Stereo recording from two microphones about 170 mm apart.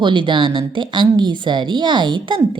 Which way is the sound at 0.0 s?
30° right (ahead or behind).